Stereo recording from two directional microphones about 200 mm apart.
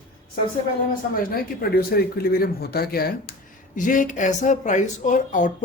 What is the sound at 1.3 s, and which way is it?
Speech, 50° left (ahead or behind).